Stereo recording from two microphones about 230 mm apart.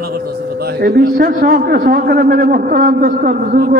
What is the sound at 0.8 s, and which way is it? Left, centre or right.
A man's voice, right.